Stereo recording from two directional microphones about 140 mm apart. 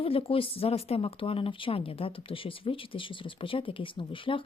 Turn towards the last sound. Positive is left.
turn(degrees=40)  # may be behind; listen again after turning